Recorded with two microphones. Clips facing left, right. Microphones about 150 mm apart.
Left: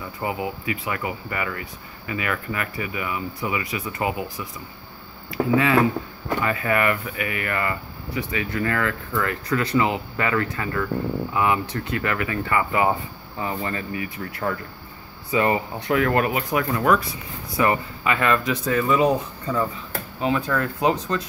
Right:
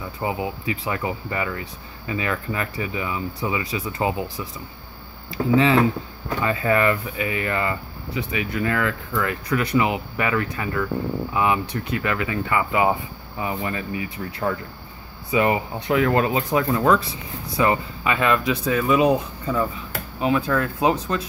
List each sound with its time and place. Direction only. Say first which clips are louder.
0.2 s speech: right 1 dB; 25° right (ahead or behind)
5.3 s speech: right 1 dB; 25° right (ahead or behind)